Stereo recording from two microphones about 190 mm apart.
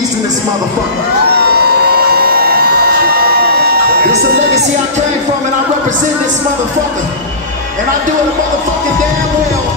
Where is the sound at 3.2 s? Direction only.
55° right (ahead or behind).